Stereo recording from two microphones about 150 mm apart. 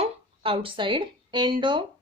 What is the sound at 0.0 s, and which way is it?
A woman's voice, 40° right (ahead or behind).